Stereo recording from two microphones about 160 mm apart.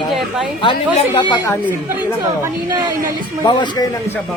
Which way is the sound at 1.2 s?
30° left (ahead or behind).